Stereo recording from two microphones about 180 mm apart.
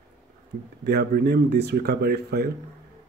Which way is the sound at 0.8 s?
60° right (ahead or behind).